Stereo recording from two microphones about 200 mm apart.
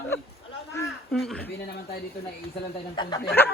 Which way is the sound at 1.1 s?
Centre (ahead or behind).